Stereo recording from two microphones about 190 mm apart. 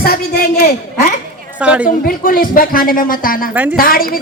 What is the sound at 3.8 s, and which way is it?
Speech, 50° left (ahead or behind).